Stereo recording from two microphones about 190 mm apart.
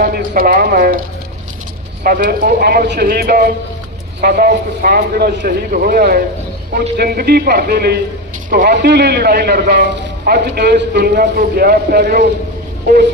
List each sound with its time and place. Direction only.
0.0 s a man's voice: 50° right (ahead or behind)
2.0 s a man's voice: 45° right (ahead or behind)
8.4 s a man's voice: 45° right (ahead or behind)
8.7 s a man's voice: 60° right (ahead or behind)